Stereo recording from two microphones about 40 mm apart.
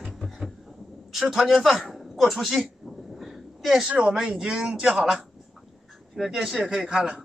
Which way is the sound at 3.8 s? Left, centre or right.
Right.